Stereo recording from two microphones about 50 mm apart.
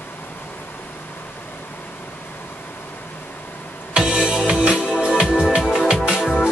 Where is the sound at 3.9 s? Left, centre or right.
Centre.